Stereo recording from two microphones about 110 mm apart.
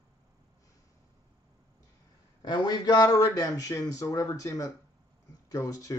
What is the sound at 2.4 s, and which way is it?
A man's voice, 40° left (ahead or behind).